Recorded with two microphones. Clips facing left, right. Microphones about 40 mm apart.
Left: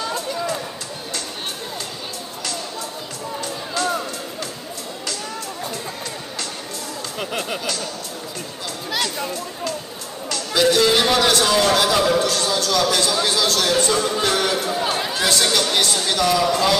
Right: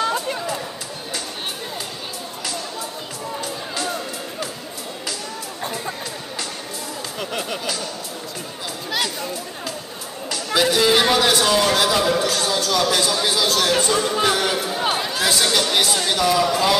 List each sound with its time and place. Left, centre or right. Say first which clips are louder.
0.0 s a sound: right 3 dB; right
3.3 s music: left 3 dB; centre
10.3 s a man's voice: left 2 dB; centre
15.0 s chatter: even; centre
15.3 s a man's voice: even; centre